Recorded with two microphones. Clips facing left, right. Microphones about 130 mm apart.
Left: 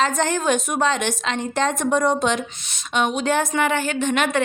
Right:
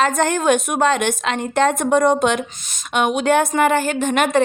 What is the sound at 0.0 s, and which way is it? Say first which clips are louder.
A woman's voice: right 3 dB; 55° right (ahead or behind).